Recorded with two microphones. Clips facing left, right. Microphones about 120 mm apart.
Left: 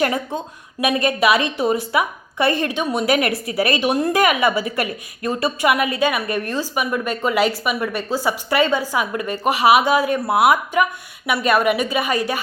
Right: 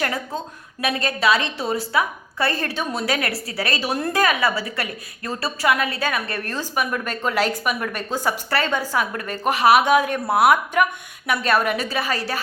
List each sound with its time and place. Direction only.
0.0 s a woman's voice: 25° left (ahead or behind)